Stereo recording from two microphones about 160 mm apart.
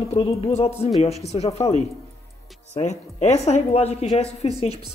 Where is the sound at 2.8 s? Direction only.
45° left (ahead or behind).